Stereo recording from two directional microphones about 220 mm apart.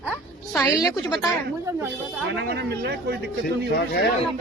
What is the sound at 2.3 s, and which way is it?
Speech, 50° right (ahead or behind).